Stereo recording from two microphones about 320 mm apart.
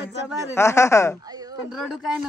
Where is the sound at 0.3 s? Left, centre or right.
Centre.